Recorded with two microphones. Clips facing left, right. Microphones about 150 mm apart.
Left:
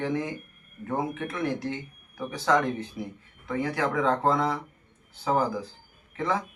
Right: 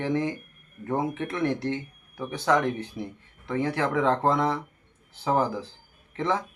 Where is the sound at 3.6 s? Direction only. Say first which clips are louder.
Right 2 dB; 25° right (ahead or behind).